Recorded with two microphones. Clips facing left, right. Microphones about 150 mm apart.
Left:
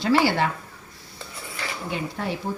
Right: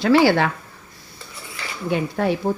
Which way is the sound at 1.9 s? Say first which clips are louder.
Right 9 dB; 55° right (ahead or behind).